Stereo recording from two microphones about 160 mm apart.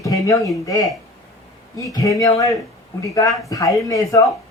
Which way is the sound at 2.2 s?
20° left (ahead or behind).